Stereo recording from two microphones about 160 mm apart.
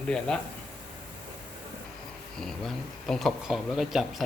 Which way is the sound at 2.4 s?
Centre (ahead or behind).